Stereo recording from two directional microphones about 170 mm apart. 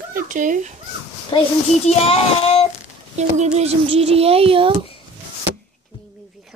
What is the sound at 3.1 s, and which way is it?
Speech, 45° right (ahead or behind).